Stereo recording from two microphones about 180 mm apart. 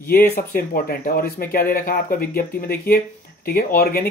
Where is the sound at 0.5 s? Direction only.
55° left (ahead or behind).